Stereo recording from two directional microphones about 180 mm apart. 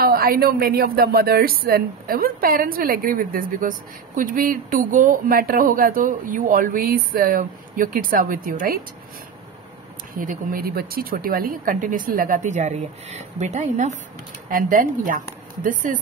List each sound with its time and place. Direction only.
0.0 s a woman's voice: 55° right (ahead or behind)
10.1 s a woman's voice: 55° right (ahead or behind)